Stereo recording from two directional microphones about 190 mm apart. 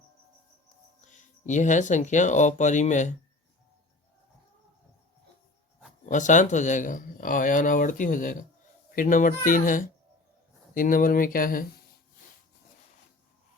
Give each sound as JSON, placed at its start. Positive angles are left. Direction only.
{"t": 1.0, "sound": "speech", "side_deg": 40}
{"t": 6.1, "sound": "speech", "side_deg": 40}